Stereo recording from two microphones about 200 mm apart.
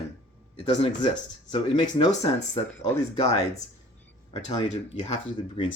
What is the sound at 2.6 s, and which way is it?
Speech, 30° left (ahead or behind).